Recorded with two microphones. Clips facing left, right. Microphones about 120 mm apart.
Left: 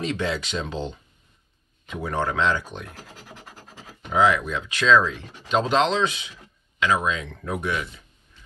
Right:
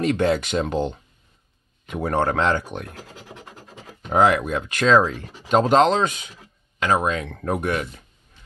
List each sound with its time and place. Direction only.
0.0 s speech: 55° right (ahead or behind)
4.1 s speech: 55° right (ahead or behind)